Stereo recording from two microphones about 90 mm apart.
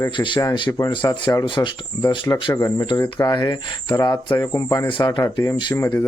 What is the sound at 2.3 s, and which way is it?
Speech, 30° left (ahead or behind).